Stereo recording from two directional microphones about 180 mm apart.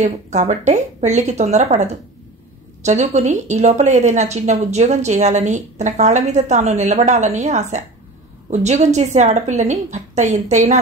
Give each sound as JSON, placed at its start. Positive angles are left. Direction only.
{"t": 0.0, "sound": "a woman's voice", "side_deg": -40}